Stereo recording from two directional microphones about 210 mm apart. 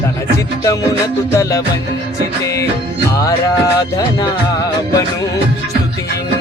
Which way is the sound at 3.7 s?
15° left (ahead or behind).